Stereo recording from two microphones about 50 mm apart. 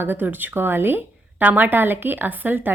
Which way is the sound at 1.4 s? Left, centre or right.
Right.